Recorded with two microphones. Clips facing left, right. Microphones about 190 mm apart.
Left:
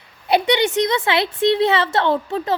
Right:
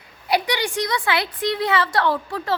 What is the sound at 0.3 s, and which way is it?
A woman's voice, 25° left (ahead or behind).